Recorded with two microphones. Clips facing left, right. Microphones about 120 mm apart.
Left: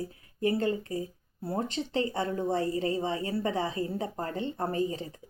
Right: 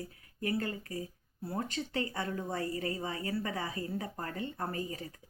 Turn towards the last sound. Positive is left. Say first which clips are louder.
# left 7 dB
turn(degrees=25)  # may be behind; listen again after turning